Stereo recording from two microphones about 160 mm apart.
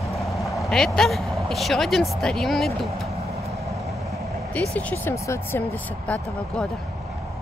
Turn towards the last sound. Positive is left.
turn(degrees=10)  # may be behind; listen again after turning